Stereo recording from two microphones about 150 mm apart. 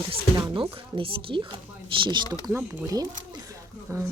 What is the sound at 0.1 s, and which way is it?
Speech, 30° right (ahead or behind).